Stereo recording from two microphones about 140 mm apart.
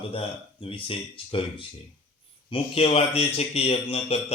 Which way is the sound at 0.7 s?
40° left (ahead or behind).